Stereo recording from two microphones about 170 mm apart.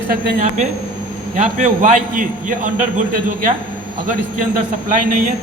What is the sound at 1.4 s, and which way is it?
A man's voice, 50° right (ahead or behind).